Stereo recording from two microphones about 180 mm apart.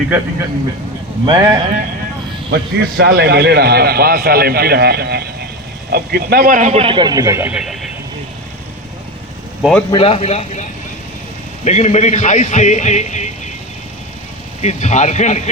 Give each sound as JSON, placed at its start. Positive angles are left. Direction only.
{"t": 1.2, "sound": "a man's voice", "side_deg": -25}
{"t": 2.5, "sound": "a man's voice", "side_deg": -65}
{"t": 9.6, "sound": "a man's voice", "side_deg": 0}
{"t": 9.9, "sound": "a man's voice", "side_deg": 30}
{"t": 14.6, "sound": "a man's voice", "side_deg": 40}